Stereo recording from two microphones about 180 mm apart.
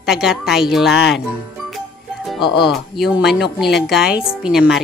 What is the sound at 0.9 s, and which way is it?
Speech, 75° left (ahead or behind).